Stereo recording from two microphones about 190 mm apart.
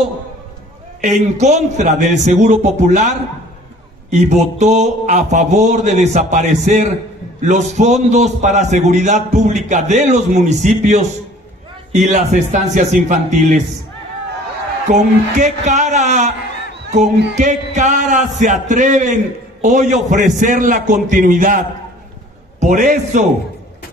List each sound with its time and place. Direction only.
1.0 s a man's voice: 40° right (ahead or behind)
14.9 s a man's voice: 40° right (ahead or behind)
17.4 s a man's voice: 40° right (ahead or behind)